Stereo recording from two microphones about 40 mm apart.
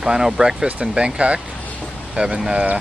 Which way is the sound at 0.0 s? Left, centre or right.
Centre.